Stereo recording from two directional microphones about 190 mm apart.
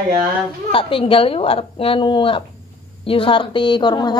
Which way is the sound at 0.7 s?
30° left (ahead or behind).